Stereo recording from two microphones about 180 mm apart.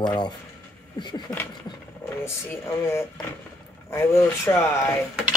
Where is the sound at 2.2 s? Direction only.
15° left (ahead or behind).